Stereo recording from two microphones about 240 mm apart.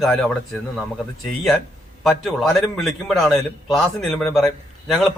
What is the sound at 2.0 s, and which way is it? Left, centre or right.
A man's voice, centre.